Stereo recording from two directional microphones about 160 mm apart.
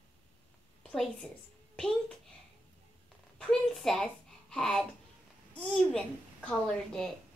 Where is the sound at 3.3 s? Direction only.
5° left (ahead or behind).